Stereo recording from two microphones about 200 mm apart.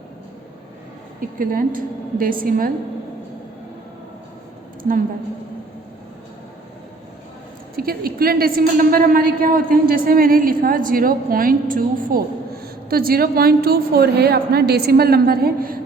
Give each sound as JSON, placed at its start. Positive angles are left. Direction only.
{"t": 1.4, "sound": "a woman's voice", "side_deg": -45}
{"t": 4.8, "sound": "a woman's voice", "side_deg": -45}
{"t": 7.8, "sound": "a woman's voice", "side_deg": -50}